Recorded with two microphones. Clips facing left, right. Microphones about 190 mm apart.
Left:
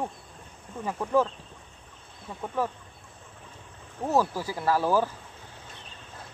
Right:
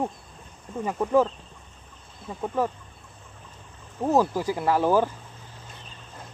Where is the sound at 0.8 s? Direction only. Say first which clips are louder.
Right 3 dB; 15° right (ahead or behind).